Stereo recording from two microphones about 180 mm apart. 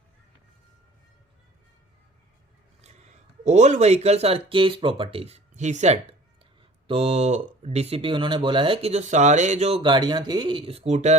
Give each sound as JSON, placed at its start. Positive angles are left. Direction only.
{"t": 2.8, "sound": "speech", "side_deg": -40}